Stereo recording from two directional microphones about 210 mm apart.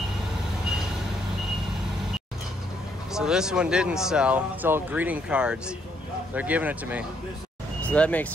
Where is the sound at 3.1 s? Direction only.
5° right (ahead or behind).